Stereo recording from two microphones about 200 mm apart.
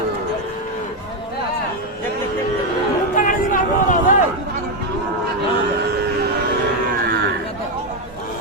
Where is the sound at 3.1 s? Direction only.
40° left (ahead or behind).